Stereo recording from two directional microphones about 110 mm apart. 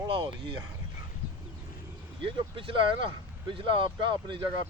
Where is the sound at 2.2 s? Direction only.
55° right (ahead or behind).